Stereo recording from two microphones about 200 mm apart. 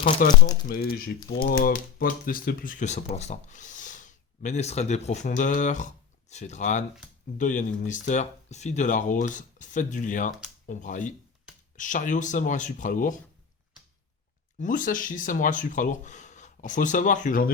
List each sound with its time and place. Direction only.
0.2 s speech: 45° left (ahead or behind)
14.6 s speech: 40° left (ahead or behind)